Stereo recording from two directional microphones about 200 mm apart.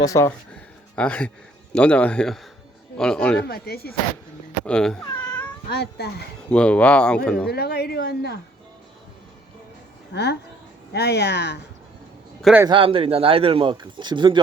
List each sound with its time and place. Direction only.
0.0 s speech: 15° left (ahead or behind)
3.4 s a woman's voice: 50° left (ahead or behind)
4.6 s cat: 5° left (ahead or behind)
5.7 s a woman's voice: 55° left (ahead or behind)
6.5 s speech: 5° left (ahead or behind)
7.4 s a woman's voice: 55° left (ahead or behind)
10.1 s speech: 60° left (ahead or behind)
12.4 s a man's voice: centre (ahead or behind)
12.6 s speech: 25° right (ahead or behind)